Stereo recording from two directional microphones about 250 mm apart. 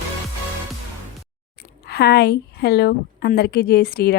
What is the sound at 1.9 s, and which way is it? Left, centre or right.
A woman's voice, left.